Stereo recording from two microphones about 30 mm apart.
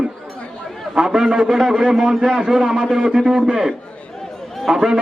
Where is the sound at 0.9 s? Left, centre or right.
Right.